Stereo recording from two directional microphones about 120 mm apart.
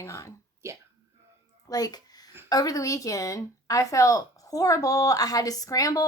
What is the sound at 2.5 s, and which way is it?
A woman's voice, 30° left (ahead or behind).